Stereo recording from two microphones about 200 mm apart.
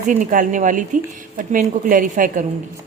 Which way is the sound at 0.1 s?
40° right (ahead or behind).